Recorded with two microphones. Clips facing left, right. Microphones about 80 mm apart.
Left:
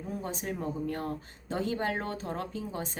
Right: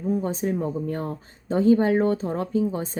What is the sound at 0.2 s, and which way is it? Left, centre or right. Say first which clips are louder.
Speech: right 10 dB; right.